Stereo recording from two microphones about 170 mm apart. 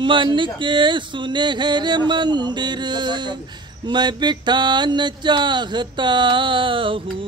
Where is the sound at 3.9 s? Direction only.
25° right (ahead or behind).